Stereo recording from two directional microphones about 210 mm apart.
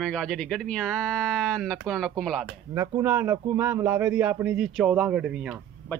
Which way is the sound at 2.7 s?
15° right (ahead or behind).